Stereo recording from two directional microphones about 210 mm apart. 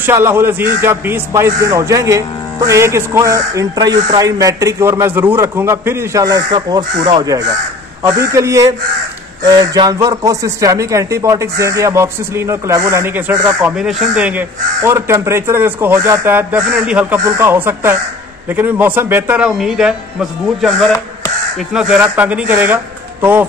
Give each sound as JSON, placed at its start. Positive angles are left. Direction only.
{"t": 0.0, "sound": "speech", "side_deg": -10}
{"t": 21.5, "sound": "speech", "side_deg": -5}